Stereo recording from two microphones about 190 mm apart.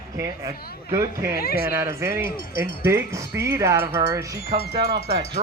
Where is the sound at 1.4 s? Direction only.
55° left (ahead or behind).